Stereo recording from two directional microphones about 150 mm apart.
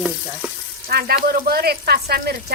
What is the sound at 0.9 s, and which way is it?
Speech, 90° right.